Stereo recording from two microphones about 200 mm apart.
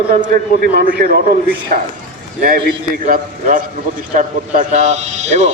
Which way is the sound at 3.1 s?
40° right (ahead or behind).